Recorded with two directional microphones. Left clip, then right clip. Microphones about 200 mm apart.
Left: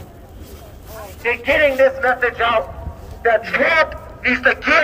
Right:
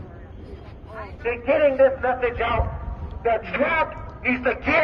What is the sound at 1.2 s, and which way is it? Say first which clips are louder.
A man's voice: left 4 dB; 50° left (ahead or behind).